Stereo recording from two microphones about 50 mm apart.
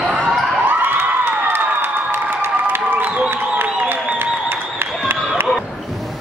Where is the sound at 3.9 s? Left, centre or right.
Right.